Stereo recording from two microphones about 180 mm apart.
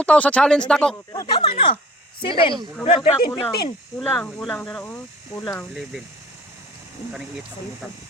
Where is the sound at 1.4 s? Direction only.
30° left (ahead or behind).